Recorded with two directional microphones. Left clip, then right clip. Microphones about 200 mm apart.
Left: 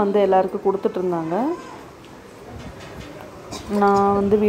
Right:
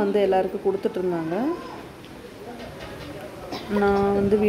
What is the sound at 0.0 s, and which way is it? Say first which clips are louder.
Speech: left 4 dB; 5° left (ahead or behind).